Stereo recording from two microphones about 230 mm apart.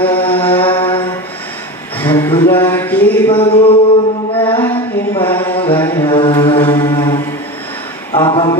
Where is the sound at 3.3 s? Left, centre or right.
Left.